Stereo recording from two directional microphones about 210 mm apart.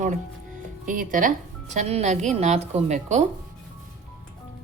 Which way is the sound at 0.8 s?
40° right (ahead or behind).